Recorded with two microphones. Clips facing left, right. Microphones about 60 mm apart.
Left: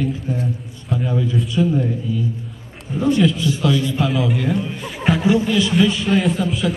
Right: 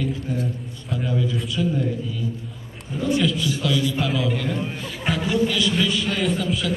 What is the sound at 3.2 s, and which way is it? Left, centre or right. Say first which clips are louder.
A man's voice: left 5 dB; left.